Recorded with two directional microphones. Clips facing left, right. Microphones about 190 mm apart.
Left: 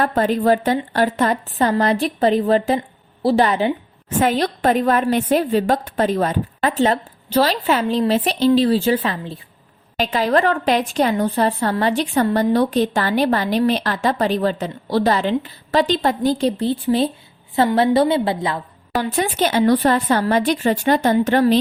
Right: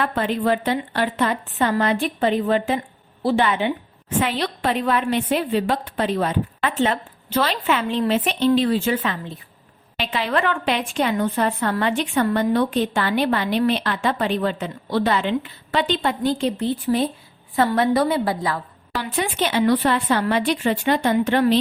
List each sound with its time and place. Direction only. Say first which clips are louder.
0.0 s a woman's voice: left 4 dB; 40° left (ahead or behind); by 18.6 s 20° left (ahead or behind)
18.9 s a woman's voice: left 4 dB; 40° left (ahead or behind)